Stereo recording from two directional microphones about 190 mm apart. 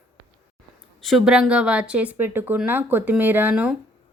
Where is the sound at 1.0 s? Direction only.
Centre (ahead or behind).